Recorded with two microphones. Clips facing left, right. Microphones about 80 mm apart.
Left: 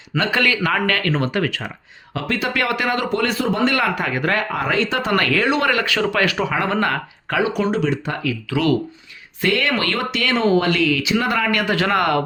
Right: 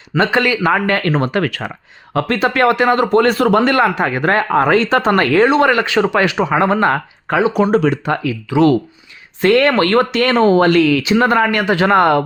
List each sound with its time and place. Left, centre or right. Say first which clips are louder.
0.2 s speech: right 5 dB; right
1.3 s a man's voice: right 4 dB; right
3.8 s speech: right 6 dB; right
5.1 s speech: right 5 dB; right
7.7 s a man's voice: right 7 dB; right
8.2 s speech: right 6 dB; right
9.4 s speech: right 8 dB; right
11.6 s speech: right 6 dB; right